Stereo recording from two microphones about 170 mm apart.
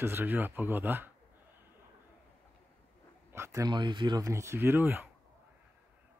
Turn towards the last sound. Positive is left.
turn(degrees=-15)  # may be behind; listen again after turning